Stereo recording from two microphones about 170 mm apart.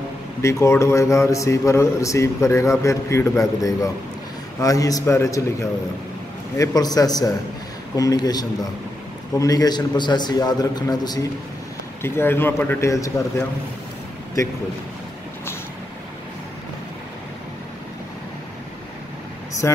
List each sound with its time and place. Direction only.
0.4 s a man's voice: 15° left (ahead or behind)
19.6 s a man's voice: 15° left (ahead or behind)